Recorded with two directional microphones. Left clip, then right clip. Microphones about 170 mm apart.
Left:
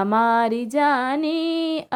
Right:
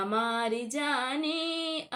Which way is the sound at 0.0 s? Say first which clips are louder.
Left 11 dB; 55° left (ahead or behind).